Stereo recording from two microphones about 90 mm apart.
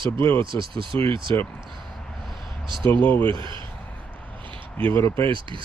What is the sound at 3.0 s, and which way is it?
Speech, 20° left (ahead or behind).